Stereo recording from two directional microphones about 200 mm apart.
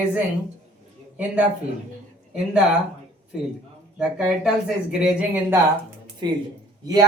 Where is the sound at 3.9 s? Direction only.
5° right (ahead or behind).